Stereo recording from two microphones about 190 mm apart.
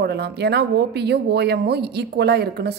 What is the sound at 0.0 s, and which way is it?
A woman's voice, 60° right (ahead or behind).